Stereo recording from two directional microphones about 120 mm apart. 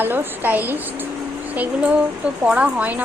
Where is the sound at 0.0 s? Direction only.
15° right (ahead or behind).